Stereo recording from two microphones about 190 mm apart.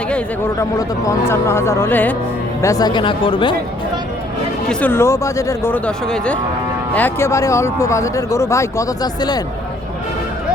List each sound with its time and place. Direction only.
0.6 s speech: 15° left (ahead or behind)
4.7 s speech: 10° left (ahead or behind)